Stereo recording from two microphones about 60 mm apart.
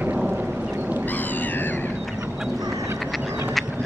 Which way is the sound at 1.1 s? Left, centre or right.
Left.